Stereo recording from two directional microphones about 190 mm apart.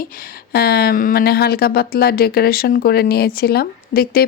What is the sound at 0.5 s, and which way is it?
Speech, 55° left (ahead or behind).